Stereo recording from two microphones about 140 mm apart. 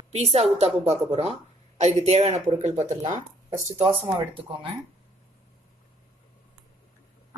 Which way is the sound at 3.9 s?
35° right (ahead or behind).